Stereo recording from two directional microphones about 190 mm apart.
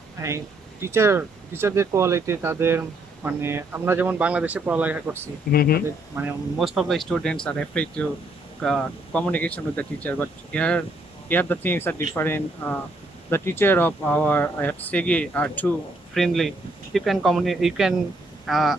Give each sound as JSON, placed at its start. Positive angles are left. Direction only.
{"t": 0.2, "sound": "speech", "side_deg": -15}
{"t": 5.5, "sound": "speech", "side_deg": 50}
{"t": 6.6, "sound": "speech", "side_deg": 0}